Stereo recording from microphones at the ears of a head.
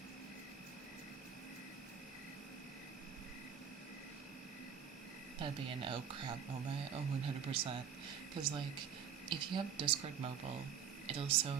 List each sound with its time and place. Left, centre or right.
5.4 s speech: right